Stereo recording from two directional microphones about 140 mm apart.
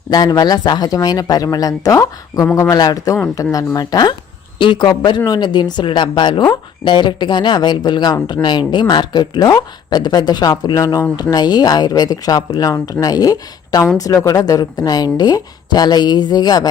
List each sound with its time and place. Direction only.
0.1 s speech: 30° left (ahead or behind)